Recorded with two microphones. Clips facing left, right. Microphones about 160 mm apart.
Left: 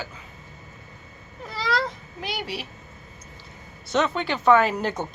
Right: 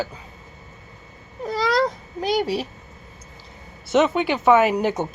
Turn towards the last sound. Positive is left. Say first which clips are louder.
# right 4 dB
turn(degrees=-15)  # may be behind; listen again after turning